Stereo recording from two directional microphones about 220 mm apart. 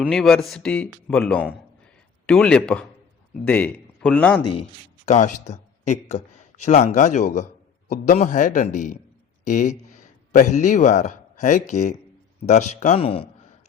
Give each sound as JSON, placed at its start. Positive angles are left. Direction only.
{"t": 0.0, "sound": "speech", "side_deg": 0}
{"t": 5.0, "sound": "speech", "side_deg": 30}